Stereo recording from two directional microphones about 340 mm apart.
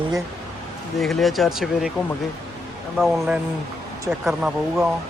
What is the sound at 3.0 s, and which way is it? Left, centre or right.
Speech, centre.